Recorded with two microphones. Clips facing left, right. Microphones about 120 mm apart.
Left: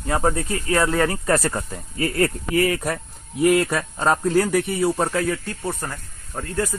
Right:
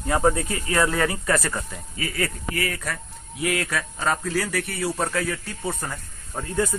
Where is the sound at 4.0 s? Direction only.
30° left (ahead or behind).